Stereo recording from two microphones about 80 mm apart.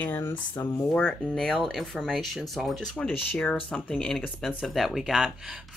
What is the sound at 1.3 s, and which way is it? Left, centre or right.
Speech, centre.